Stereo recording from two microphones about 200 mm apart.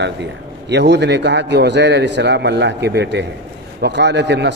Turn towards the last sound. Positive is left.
turn(degrees=-60)  # may be behind; listen again after turning